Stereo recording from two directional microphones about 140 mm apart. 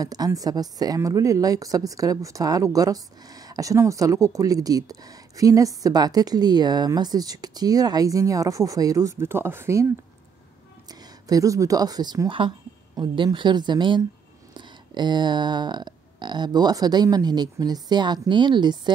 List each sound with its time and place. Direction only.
0.0 s a woman's voice: 25° right (ahead or behind)
10.9 s speech: 25° right (ahead or behind)